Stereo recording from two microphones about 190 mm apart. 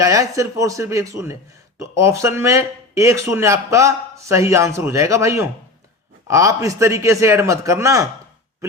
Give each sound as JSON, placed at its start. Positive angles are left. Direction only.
{"t": 0.0, "sound": "speech", "side_deg": -15}